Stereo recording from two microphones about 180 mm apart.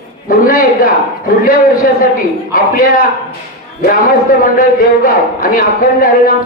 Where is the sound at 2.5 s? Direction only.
55° left (ahead or behind).